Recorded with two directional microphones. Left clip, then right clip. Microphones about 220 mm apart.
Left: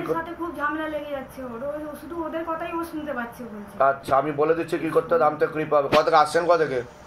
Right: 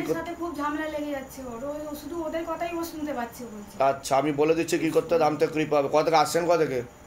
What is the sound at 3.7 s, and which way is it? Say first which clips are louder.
Speech: left 3 dB; 35° right (ahead or behind).